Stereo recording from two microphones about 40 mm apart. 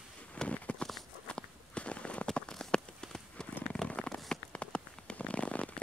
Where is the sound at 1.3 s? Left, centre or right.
Left.